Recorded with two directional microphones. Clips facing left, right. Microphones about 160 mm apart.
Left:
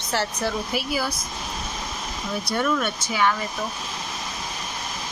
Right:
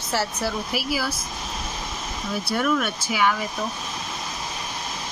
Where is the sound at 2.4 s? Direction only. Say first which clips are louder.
Right 1 dB; 5° right (ahead or behind).